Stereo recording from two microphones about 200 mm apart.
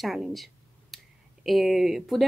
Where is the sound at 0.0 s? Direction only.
Centre (ahead or behind).